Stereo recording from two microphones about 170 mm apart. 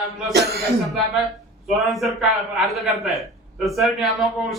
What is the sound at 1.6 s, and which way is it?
Speech, centre (ahead or behind).